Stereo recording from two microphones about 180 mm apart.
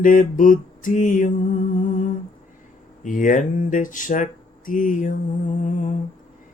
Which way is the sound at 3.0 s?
45° left (ahead or behind).